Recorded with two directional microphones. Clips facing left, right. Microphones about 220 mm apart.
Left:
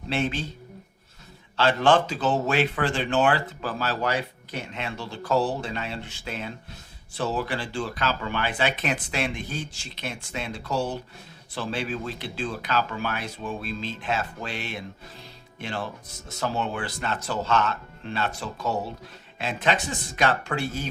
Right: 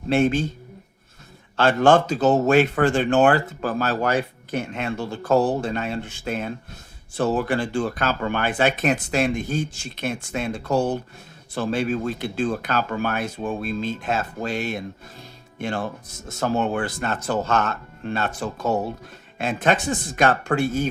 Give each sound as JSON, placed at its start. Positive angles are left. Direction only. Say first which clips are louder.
{"t": 0.1, "sound": "speech", "louder": "right 8 dB", "side_deg": -45}
{"t": 1.5, "sound": "speech", "louder": "right 4 dB", "side_deg": -45}